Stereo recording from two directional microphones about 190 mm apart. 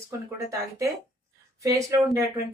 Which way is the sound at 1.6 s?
15° right (ahead or behind).